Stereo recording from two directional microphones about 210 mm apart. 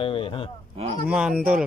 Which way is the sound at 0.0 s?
25° left (ahead or behind).